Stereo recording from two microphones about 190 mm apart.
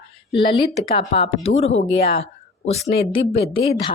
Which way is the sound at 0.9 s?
30° left (ahead or behind).